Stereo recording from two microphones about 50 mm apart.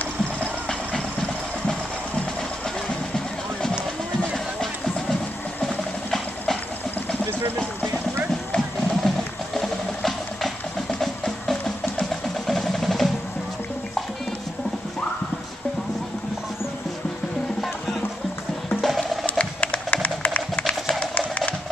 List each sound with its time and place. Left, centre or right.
4.6 s music: centre
5.6 s engine: centre
8.5 s music: centre
18.8 s music: centre
19.2 s music: left